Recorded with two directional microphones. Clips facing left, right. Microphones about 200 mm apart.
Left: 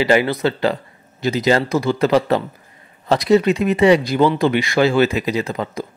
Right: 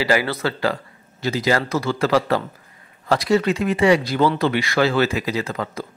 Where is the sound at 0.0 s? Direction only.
20° left (ahead or behind).